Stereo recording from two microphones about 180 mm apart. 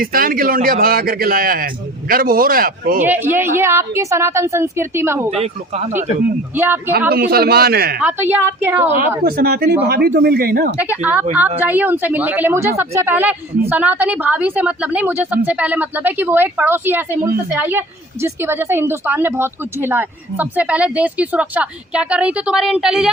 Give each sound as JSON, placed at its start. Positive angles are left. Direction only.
{"t": 0.0, "sound": "a man's voice", "side_deg": -55}
{"t": 3.0, "sound": "speech", "side_deg": -10}
{"t": 5.3, "sound": "speech", "side_deg": -35}
{"t": 6.6, "sound": "speech", "side_deg": -10}
{"t": 7.1, "sound": "speech", "side_deg": -60}
{"t": 7.9, "sound": "speech", "side_deg": -10}
{"t": 9.2, "sound": "speech", "side_deg": -60}
{"t": 11.0, "sound": "speech", "side_deg": -10}